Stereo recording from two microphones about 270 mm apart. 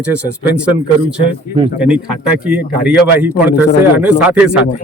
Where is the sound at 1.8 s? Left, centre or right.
Centre.